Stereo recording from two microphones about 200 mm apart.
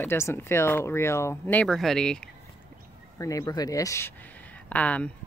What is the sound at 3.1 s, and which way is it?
A woman's voice, 15° left (ahead or behind).